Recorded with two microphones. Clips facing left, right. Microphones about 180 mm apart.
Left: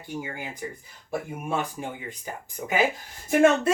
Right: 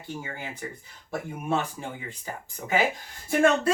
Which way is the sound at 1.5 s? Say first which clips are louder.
Left 1 dB; 15° left (ahead or behind).